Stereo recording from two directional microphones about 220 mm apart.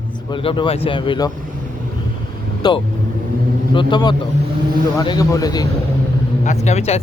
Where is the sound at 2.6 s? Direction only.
20° left (ahead or behind).